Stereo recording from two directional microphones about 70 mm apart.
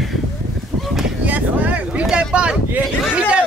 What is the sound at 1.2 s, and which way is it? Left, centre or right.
Speech, right.